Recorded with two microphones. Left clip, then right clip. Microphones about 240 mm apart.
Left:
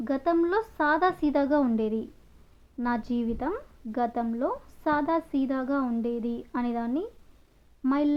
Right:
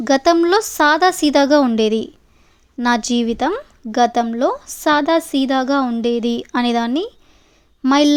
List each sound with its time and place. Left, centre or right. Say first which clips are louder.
0.0 s a woman's voice: right 12 dB; right